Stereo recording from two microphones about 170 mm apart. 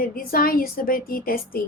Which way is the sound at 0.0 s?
60° left (ahead or behind).